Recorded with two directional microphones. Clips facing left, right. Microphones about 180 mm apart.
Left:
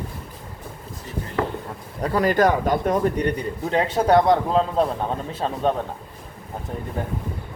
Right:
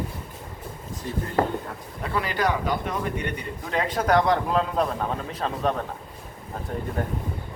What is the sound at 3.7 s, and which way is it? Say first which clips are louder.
A man's voice: left 4 dB; 30° left (ahead or behind).